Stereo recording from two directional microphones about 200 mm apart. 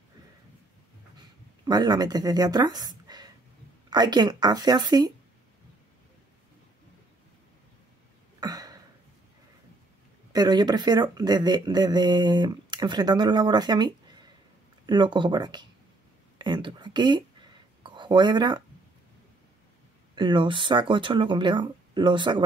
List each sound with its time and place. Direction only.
1.6 s speech: 20° right (ahead or behind)
8.4 s a sound: 20° right (ahead or behind)
10.3 s speech: 20° right (ahead or behind)
16.3 s a sound: 20° right (ahead or behind)
17.8 s speech: 25° right (ahead or behind)
20.2 s speech: 25° right (ahead or behind)